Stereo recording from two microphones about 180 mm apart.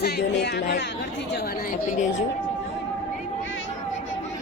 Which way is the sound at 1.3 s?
65° left (ahead or behind).